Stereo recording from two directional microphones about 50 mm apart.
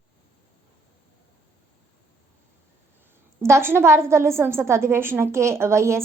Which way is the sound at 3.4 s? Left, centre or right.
Right.